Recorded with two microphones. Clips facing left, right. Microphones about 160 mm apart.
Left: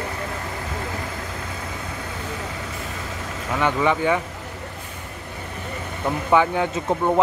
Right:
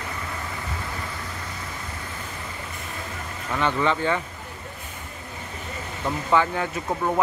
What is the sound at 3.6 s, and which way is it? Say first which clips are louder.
Speech: left 3 dB; 15° left (ahead or behind).